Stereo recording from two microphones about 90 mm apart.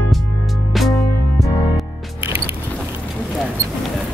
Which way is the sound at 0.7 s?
Centre (ahead or behind).